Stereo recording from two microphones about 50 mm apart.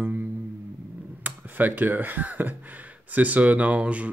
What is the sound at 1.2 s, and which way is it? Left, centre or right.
Speech, right.